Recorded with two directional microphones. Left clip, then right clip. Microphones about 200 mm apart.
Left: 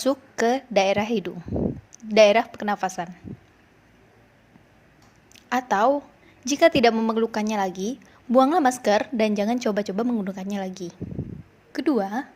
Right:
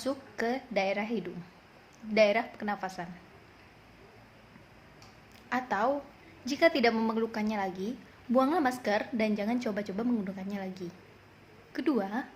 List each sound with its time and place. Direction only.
0.0 s a woman's voice: 45° left (ahead or behind)
5.5 s a woman's voice: 40° left (ahead or behind)